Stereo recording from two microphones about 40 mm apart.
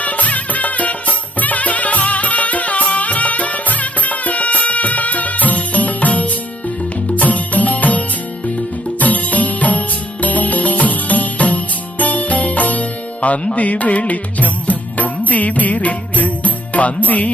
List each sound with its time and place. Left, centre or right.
0.0 s music: left
13.2 s music: left